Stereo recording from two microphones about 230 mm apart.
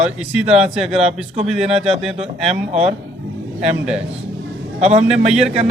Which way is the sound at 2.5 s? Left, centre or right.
Right.